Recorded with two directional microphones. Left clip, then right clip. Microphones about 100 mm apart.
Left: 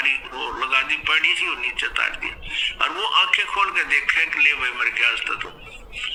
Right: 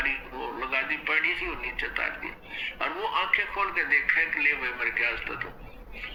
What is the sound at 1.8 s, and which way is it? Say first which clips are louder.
A man's voice: left 5 dB; 25° left (ahead or behind).